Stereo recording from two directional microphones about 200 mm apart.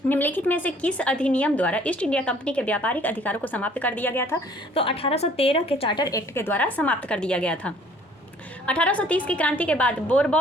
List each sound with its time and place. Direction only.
0.1 s a woman's voice: 10° left (ahead or behind)
4.7 s a woman's voice: 30° left (ahead or behind); by 10.3 s 5° left (ahead or behind)